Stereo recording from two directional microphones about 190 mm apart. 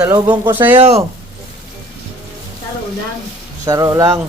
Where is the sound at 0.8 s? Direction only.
35° right (ahead or behind).